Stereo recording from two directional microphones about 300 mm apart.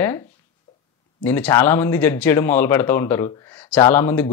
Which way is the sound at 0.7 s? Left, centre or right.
Centre.